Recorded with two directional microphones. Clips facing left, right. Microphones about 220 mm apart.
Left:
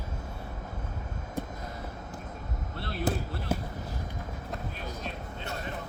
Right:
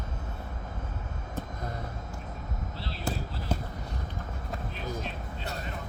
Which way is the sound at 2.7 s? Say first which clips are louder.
Left 7 dB; 55° left (ahead or behind).